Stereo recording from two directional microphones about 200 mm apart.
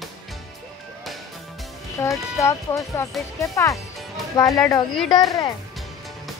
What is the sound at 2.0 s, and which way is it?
Speech, 15° left (ahead or behind).